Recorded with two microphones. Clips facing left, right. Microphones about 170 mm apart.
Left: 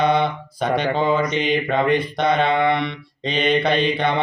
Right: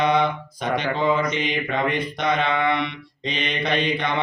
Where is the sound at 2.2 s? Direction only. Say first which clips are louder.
Left 3 dB; 35° left (ahead or behind).